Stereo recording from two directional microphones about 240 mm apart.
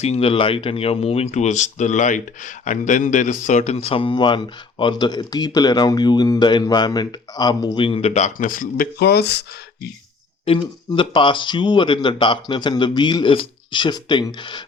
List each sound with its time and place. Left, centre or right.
0.0 s speech: left
10.4 s speech: left